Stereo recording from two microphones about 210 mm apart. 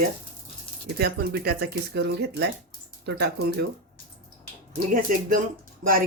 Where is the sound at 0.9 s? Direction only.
45° right (ahead or behind).